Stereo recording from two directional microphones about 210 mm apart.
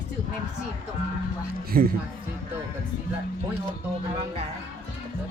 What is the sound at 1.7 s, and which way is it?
Speech, 45° right (ahead or behind).